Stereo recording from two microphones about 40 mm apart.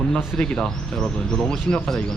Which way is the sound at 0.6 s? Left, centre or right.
Centre.